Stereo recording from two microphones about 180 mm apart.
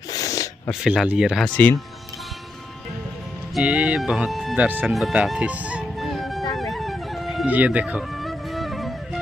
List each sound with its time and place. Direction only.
0.1 s snort: 20° left (ahead or behind)
0.7 s speech: 5° right (ahead or behind)
3.5 s speech: 5° right (ahead or behind)
6.5 s music: centre (ahead or behind)